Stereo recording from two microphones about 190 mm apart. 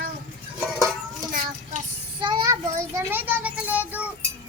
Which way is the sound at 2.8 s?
10° right (ahead or behind).